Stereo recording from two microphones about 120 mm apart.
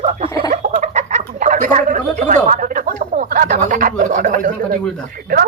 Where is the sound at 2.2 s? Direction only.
90° right.